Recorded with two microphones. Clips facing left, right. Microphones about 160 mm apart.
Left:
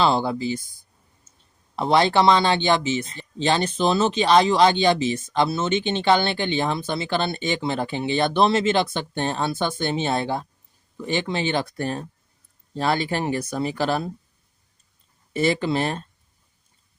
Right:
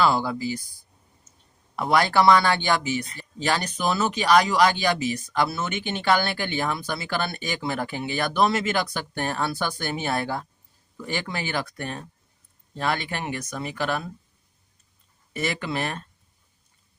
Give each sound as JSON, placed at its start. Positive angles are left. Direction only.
{"t": 0.0, "sound": "speech", "side_deg": 25}
{"t": 1.7, "sound": "speech", "side_deg": 25}
{"t": 15.3, "sound": "speech", "side_deg": 30}